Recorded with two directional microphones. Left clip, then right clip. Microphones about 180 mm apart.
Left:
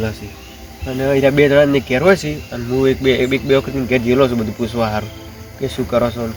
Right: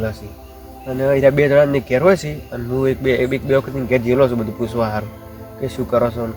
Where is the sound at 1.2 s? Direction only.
15° right (ahead or behind).